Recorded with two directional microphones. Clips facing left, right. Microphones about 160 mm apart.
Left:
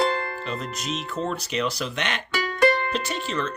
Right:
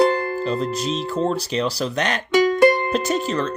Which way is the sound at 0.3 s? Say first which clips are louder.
Right 9 dB; 35° right (ahead or behind).